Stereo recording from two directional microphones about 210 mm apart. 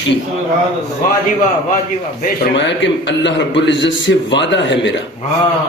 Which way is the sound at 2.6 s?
60° left (ahead or behind).